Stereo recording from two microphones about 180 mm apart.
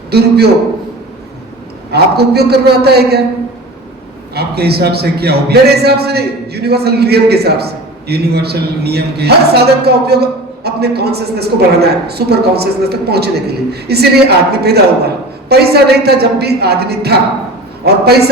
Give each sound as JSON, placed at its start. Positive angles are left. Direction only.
{"t": 0.1, "sound": "a man's voice", "side_deg": -65}
{"t": 1.9, "sound": "a man's voice", "side_deg": -65}
{"t": 4.4, "sound": "a man's voice", "side_deg": -65}